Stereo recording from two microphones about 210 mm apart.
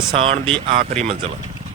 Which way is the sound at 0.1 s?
25° right (ahead or behind).